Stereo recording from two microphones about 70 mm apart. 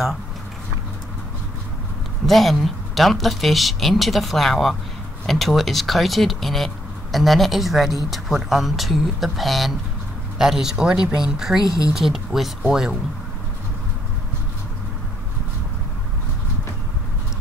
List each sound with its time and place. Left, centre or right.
2.2 s speech: centre
11.6 s speech: left
11.9 s speech: centre